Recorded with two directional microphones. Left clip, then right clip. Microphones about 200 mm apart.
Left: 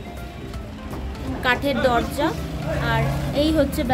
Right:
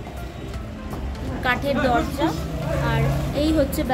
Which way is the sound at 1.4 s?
15° left (ahead or behind).